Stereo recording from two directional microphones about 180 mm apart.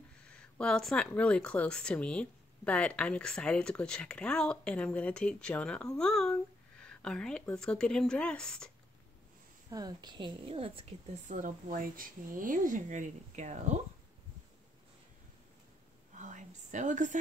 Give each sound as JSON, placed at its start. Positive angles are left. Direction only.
{"t": 0.2, "sound": "speech", "side_deg": 5}
{"t": 9.7, "sound": "a woman's voice", "side_deg": -20}
{"t": 16.2, "sound": "a sound", "side_deg": -45}